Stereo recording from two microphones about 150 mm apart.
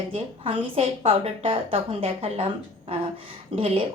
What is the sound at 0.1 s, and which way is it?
A woman's voice, 40° right (ahead or behind).